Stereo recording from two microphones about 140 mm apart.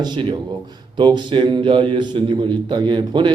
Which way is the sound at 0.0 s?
35° right (ahead or behind).